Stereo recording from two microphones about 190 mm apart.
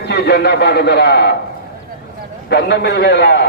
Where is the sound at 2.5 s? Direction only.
60° left (ahead or behind).